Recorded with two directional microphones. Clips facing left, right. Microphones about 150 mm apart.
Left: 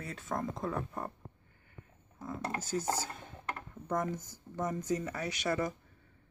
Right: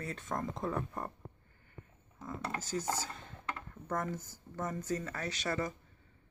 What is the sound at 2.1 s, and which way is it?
Speech, 10° left (ahead or behind).